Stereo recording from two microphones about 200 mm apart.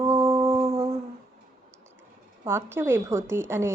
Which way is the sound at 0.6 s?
30° right (ahead or behind).